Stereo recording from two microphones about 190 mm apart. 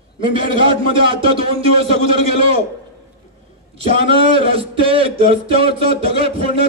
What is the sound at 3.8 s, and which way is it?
Speech, 30° right (ahead or behind).